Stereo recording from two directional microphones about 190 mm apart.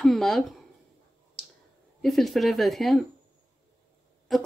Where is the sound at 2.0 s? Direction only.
Centre (ahead or behind).